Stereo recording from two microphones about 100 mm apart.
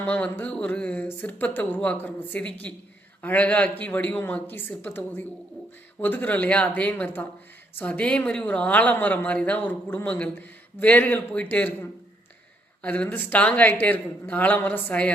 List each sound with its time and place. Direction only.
0.0 s speech: 15° left (ahead or behind)